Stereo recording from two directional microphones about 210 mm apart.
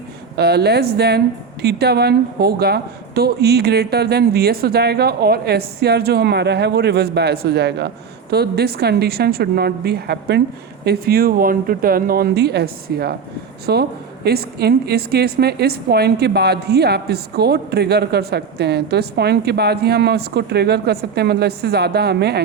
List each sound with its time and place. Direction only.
0.3 s a woman's voice: 50° right (ahead or behind)